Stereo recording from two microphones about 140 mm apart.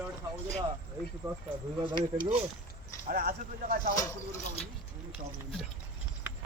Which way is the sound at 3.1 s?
90° right.